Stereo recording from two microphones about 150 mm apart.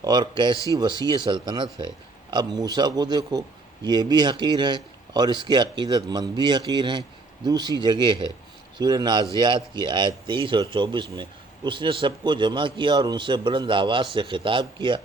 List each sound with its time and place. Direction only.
0.0 s a man's voice: 30° right (ahead or behind)